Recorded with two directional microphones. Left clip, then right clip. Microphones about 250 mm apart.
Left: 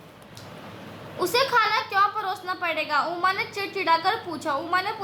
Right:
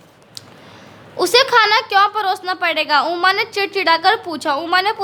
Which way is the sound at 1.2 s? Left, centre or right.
Right.